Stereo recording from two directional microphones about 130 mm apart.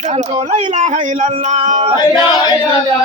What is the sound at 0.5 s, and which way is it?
Speech, 65° right (ahead or behind).